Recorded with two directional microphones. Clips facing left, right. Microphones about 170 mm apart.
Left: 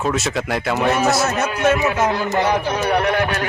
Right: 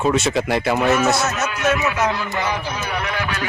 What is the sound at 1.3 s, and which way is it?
Music, 30° left (ahead or behind).